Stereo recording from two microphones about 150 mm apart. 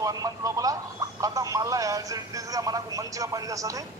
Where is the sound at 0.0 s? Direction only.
25° right (ahead or behind).